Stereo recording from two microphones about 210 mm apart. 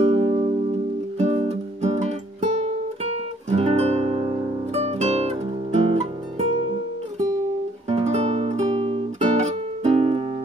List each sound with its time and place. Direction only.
0.0 s music: 25° right (ahead or behind)
7.9 s music: 30° right (ahead or behind)